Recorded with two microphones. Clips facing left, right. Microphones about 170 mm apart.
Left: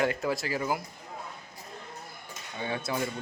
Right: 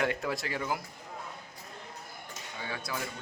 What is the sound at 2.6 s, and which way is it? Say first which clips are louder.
Speech: left 6 dB; 25° left (ahead or behind).